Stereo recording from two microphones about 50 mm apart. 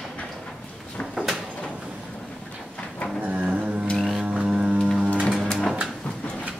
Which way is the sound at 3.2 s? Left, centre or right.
Right.